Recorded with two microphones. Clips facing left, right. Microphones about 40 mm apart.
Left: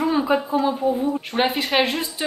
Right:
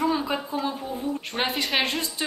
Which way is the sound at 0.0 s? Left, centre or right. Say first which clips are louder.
Left 4 dB; left.